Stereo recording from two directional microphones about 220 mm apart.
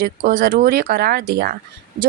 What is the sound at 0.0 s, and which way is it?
Speech, 40° right (ahead or behind).